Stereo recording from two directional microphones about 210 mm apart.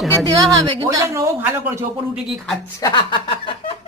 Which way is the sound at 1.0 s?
15° right (ahead or behind).